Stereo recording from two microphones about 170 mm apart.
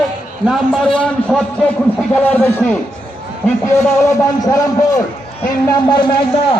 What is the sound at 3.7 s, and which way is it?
A man's voice, 20° left (ahead or behind).